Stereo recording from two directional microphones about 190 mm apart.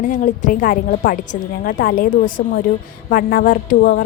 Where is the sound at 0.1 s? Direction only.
45° left (ahead or behind).